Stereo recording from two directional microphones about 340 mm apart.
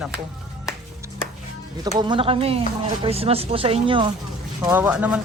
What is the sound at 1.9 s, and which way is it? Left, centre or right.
Speech, centre.